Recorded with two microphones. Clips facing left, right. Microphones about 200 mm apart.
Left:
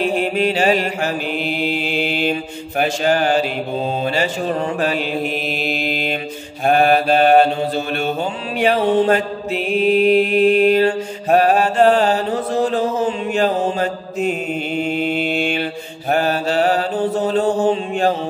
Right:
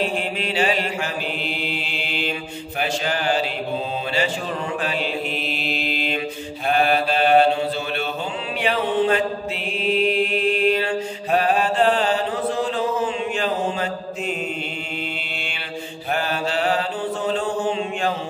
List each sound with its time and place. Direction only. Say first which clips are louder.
0.4 s mantra: left 6 dB; 45° left (ahead or behind)
5.6 s mantra: left 4 dB; 45° left (ahead or behind)
8.5 s mantra: left 6 dB; 45° left (ahead or behind)